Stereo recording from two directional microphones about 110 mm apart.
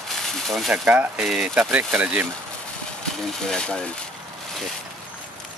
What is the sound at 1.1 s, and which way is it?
Speech, 5° right (ahead or behind).